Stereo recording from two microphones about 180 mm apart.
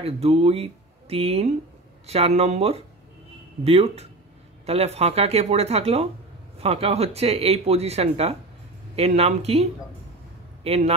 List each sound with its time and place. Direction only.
0.0 s a man's voice: 35° right (ahead or behind)